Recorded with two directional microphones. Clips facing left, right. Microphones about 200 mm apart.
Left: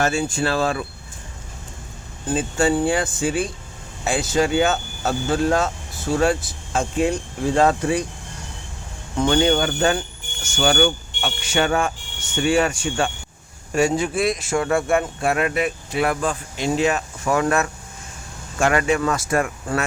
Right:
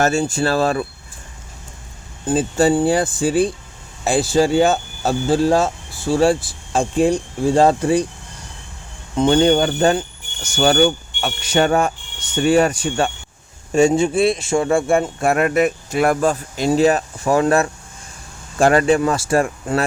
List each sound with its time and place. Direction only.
0.0 s speech: 40° right (ahead or behind)
2.2 s speech: 35° right (ahead or behind)
9.1 s speech: 25° right (ahead or behind)
9.4 s speech: 35° right (ahead or behind)
13.7 s speech: 25° right (ahead or behind)
15.2 s speech: 45° right (ahead or behind)